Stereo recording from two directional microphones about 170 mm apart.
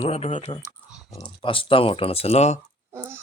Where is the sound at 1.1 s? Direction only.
30° left (ahead or behind).